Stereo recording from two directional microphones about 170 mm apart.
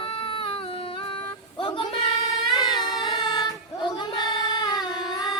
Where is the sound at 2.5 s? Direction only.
25° left (ahead or behind).